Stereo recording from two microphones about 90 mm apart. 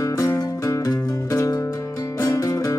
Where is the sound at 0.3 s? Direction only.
35° left (ahead or behind).